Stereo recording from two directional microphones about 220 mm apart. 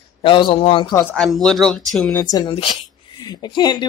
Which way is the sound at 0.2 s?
20° left (ahead or behind).